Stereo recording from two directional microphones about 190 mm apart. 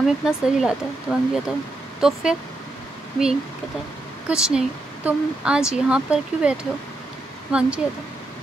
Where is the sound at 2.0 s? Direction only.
5° right (ahead or behind).